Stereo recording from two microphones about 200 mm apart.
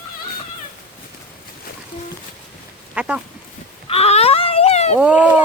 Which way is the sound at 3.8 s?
30° left (ahead or behind).